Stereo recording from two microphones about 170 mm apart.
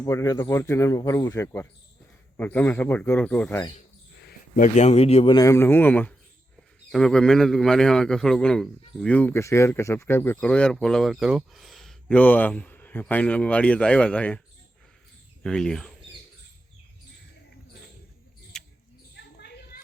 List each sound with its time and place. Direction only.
0.0 s speech: 20° left (ahead or behind)
4.2 s a man's voice: 60° left (ahead or behind); by 5.3 s 35° left (ahead or behind)
5.3 s a man's voice: 20° left (ahead or behind)
15.4 s a man's voice: 5° left (ahead or behind)
18.5 s a sound: 5° left (ahead or behind)
19.1 s a sound: 75° left (ahead or behind)